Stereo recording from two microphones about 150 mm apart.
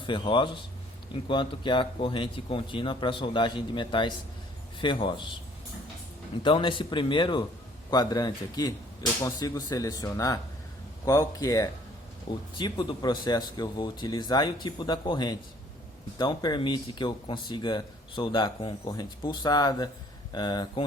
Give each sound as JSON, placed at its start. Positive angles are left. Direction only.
{"t": 0.0, "sound": "speech", "side_deg": 35}
{"t": 6.4, "sound": "speech", "side_deg": 35}